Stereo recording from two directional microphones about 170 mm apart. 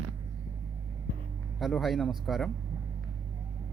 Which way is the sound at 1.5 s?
Centre (ahead or behind).